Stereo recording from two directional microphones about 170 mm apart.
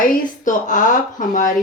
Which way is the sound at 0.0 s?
50° left (ahead or behind).